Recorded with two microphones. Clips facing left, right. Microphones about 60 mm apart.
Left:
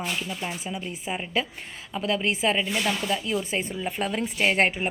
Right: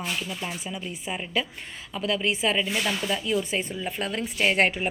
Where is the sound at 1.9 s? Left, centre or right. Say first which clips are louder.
Left 1 dB; left.